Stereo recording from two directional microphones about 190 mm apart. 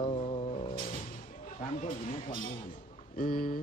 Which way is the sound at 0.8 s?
40° left (ahead or behind).